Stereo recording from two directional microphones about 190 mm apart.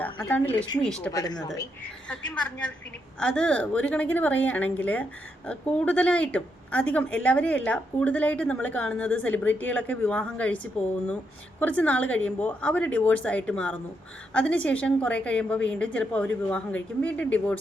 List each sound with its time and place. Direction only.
0.0 s speech: 10° left (ahead or behind)
1.1 s a woman's voice: 20° left (ahead or behind)
2.0 s speech: 5° left (ahead or behind)
11.6 s speech: 10° left (ahead or behind)